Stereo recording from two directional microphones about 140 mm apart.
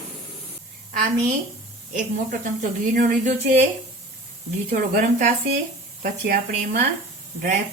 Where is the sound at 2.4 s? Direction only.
65° right (ahead or behind).